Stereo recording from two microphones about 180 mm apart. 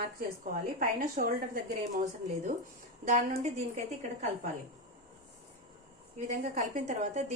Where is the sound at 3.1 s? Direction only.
45° right (ahead or behind).